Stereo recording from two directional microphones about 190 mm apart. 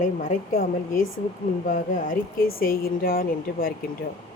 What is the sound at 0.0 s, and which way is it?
Speech, 40° left (ahead or behind).